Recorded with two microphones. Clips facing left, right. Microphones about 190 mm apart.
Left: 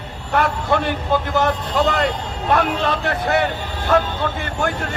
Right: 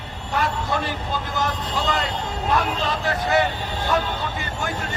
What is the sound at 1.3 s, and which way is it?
Speech, 60° left (ahead or behind).